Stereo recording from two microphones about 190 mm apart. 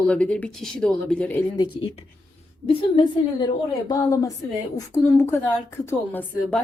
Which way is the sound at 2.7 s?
25° left (ahead or behind).